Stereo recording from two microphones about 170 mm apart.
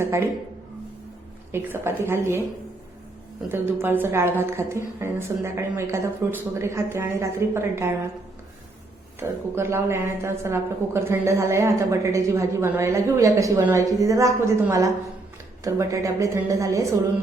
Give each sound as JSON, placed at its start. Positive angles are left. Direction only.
{"t": 0.0, "sound": "speech", "side_deg": -15}
{"t": 1.5, "sound": "a woman's voice", "side_deg": -15}
{"t": 3.5, "sound": "a woman's voice", "side_deg": -10}
{"t": 9.2, "sound": "a woman's voice", "side_deg": -15}